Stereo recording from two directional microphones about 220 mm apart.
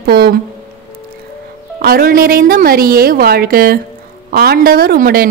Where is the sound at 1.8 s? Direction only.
45° right (ahead or behind).